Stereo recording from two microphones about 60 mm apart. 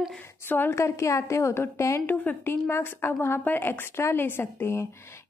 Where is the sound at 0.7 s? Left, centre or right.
Left.